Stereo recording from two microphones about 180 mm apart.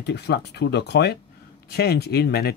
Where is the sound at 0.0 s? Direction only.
65° left (ahead or behind).